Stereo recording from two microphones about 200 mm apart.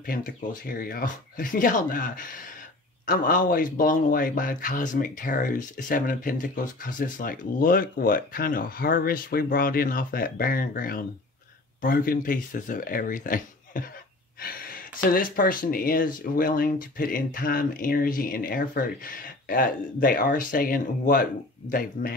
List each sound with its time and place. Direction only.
0.0 s speech: 45° left (ahead or behind)